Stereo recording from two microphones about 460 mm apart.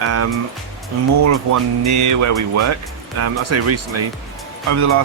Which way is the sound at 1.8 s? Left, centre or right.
Right.